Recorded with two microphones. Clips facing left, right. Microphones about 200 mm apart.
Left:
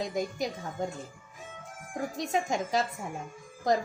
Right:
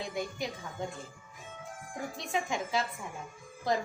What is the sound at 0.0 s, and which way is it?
Speech, 40° left (ahead or behind).